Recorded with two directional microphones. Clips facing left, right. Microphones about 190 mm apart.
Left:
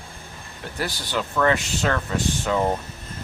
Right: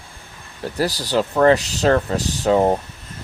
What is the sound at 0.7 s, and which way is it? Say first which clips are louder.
Speech: right 7 dB; 40° right (ahead or behind).